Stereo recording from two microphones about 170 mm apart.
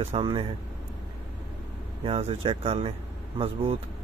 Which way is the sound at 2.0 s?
35° right (ahead or behind).